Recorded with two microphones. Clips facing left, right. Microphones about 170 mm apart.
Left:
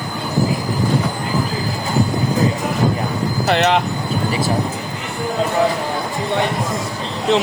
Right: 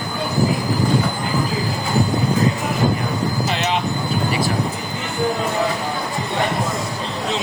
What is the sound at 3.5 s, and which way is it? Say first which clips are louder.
Speech: left 6 dB; 65° left (ahead or behind).